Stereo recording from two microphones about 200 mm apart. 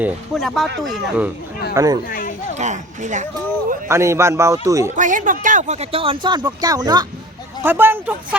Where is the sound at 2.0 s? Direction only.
45° left (ahead or behind).